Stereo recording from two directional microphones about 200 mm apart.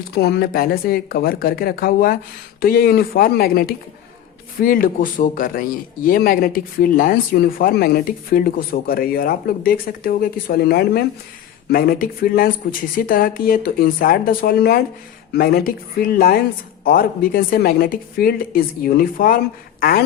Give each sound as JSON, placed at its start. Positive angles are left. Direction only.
{"t": 0.1, "sound": "a man's voice", "side_deg": 55}